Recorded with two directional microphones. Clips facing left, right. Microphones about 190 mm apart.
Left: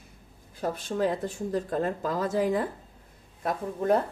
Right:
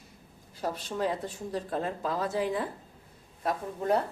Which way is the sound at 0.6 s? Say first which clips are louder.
Left 4 dB; 50° left (ahead or behind).